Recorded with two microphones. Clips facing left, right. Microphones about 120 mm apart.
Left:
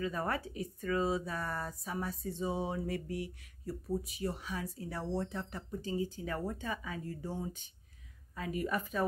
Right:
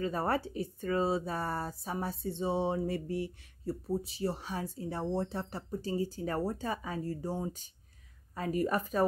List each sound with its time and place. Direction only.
0.0 s speech: 35° right (ahead or behind)